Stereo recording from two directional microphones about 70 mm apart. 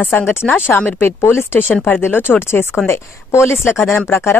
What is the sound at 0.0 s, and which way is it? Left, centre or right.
Speech, left.